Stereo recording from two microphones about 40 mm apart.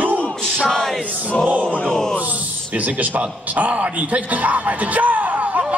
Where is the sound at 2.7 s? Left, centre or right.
Right.